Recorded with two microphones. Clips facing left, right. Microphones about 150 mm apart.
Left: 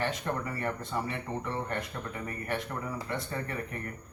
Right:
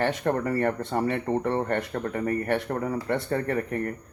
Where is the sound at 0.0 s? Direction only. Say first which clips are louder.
Right 7 dB; 65° right (ahead or behind).